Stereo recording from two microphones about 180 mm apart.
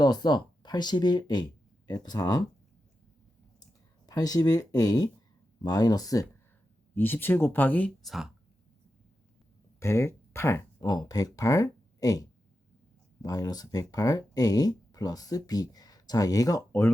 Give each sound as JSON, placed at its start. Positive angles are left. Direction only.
{"t": 0.0, "sound": "speech", "side_deg": 25}
{"t": 4.0, "sound": "speech", "side_deg": 20}
{"t": 9.8, "sound": "speech", "side_deg": 15}
{"t": 13.2, "sound": "speech", "side_deg": 20}